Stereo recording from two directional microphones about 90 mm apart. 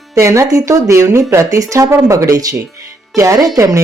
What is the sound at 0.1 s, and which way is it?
Speech, 35° right (ahead or behind).